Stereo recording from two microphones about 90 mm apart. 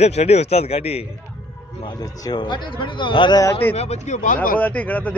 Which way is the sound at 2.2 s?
55° left (ahead or behind).